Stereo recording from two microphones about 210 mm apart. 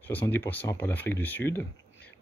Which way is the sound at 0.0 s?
10° left (ahead or behind).